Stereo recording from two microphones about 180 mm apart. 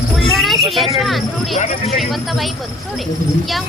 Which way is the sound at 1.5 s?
45° left (ahead or behind).